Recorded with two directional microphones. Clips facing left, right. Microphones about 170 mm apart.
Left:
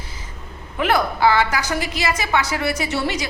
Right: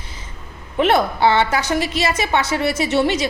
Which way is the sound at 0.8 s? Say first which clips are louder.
Right 3 dB; 25° right (ahead or behind).